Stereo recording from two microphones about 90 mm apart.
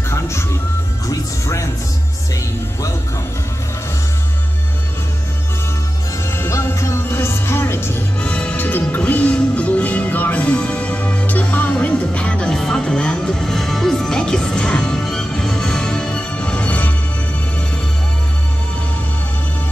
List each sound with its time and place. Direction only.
0.1 s music: 30° left (ahead or behind)
6.3 s music: 25° left (ahead or behind)
8.3 s music: 15° left (ahead or behind)